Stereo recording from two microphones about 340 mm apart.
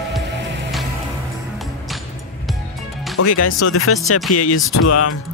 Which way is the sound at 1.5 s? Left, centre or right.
Centre.